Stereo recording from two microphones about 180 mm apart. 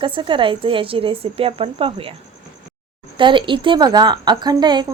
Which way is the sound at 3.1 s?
25° right (ahead or behind).